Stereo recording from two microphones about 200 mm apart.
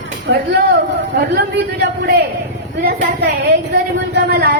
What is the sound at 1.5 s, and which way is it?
A man's voice, 55° right (ahead or behind).